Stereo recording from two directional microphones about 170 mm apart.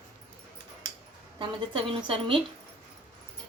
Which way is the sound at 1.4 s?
30° right (ahead or behind).